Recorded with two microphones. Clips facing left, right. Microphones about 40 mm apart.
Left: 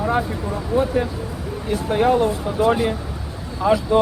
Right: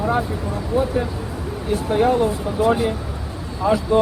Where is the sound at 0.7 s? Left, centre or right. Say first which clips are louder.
Left 1 dB; centre.